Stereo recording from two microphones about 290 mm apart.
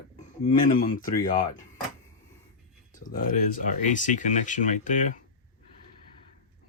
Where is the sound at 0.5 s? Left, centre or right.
Left.